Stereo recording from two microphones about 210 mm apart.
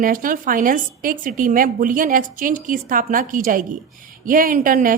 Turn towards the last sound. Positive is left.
turn(degrees=-40)  # may be behind; listen again after turning